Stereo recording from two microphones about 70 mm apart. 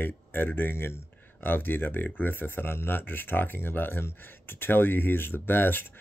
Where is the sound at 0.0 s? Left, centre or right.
Left.